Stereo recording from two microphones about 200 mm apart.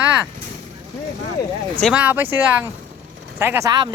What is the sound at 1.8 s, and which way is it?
Speech, 5° right (ahead or behind).